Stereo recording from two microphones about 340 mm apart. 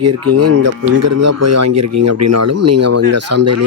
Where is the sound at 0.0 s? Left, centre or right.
Right.